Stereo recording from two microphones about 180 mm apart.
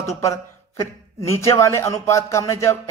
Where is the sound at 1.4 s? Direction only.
15° left (ahead or behind).